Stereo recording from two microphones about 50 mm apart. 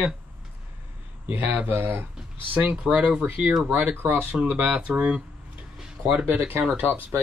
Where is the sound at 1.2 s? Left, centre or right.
Right.